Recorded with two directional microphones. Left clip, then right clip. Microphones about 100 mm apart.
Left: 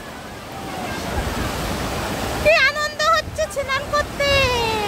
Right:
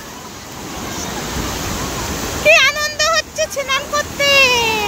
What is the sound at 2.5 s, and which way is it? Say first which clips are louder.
Vehicle: right 5 dB; centre (ahead or behind).